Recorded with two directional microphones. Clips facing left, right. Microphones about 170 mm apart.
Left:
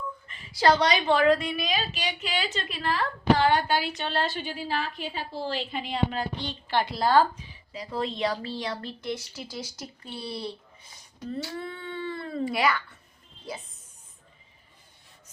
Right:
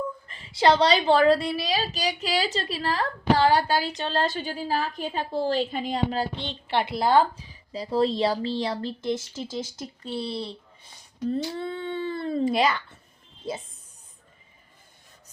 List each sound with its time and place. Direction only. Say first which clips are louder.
0.5 s a woman's voice: right 2 dB; 25° right (ahead or behind)
7.7 s a woman's voice: right 8 dB; 35° right (ahead or behind)